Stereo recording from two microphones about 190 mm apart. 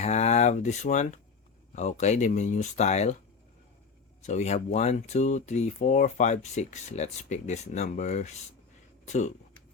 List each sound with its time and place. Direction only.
0.0 s speech: 35° left (ahead or behind)
4.2 s speech: 35° left (ahead or behind)